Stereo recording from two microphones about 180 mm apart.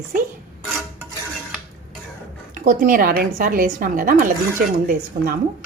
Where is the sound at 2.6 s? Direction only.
50° right (ahead or behind).